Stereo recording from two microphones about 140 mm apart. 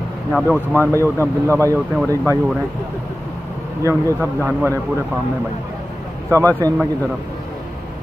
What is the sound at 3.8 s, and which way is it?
Speech, 20° right (ahead or behind).